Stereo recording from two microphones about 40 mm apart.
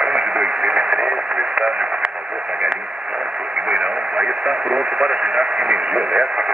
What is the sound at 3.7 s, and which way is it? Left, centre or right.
Speech, right.